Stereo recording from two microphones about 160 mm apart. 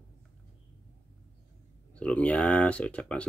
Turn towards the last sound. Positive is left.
turn(degrees=5)  # may be behind; listen again after turning